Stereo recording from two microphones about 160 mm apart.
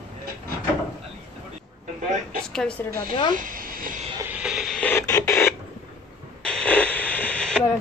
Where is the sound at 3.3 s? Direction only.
60° right (ahead or behind).